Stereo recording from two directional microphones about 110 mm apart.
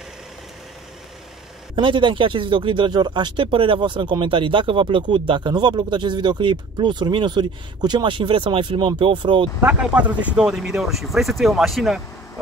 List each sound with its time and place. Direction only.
1.8 s speech: 50° right (ahead or behind)
9.6 s speech: 10° right (ahead or behind)